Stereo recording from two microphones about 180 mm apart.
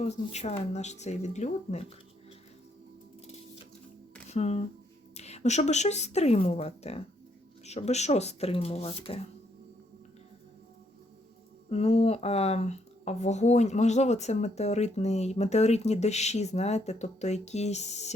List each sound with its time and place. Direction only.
0.0 s speech: 35° left (ahead or behind)
4.3 s speech: 35° left (ahead or behind)
11.7 s speech: 35° left (ahead or behind)